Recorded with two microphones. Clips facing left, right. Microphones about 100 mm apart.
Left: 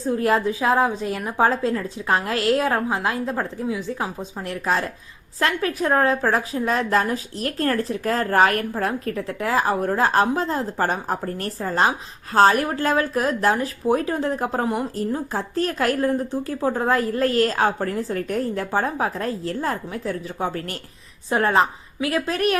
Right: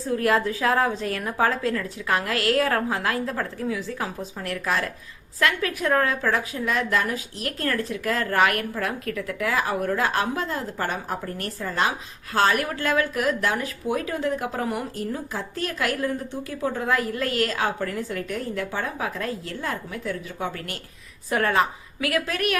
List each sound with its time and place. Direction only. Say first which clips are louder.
0.1 s a woman's voice: left 2 dB; 25° left (ahead or behind)